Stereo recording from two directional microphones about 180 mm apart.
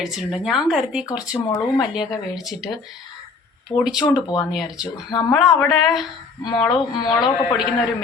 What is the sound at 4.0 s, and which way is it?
Speech, 20° left (ahead or behind).